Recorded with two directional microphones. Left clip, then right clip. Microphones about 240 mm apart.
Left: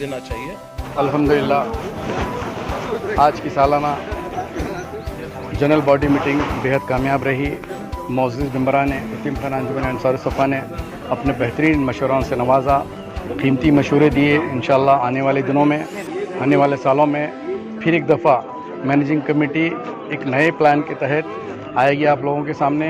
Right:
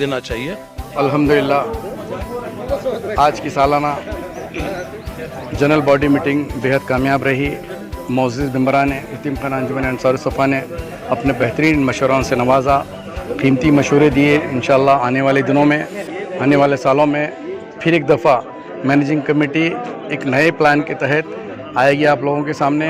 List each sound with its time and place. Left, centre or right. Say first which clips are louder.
0.9 s a man's voice: right 2 dB; right
3.2 s a man's voice: right 1 dB; right
5.5 s a man's voice: right 2 dB; right